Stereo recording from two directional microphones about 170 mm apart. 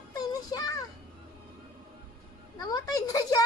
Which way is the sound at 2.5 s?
20° left (ahead or behind).